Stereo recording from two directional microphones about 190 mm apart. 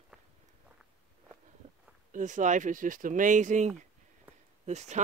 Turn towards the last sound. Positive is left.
turn(degrees=-35)  # may be behind; listen again after turning